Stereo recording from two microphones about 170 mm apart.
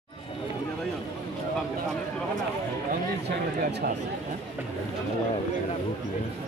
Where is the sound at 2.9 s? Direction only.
75° right (ahead or behind).